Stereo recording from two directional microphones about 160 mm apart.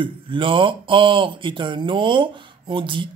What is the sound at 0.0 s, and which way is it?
Mantra, 30° right (ahead or behind).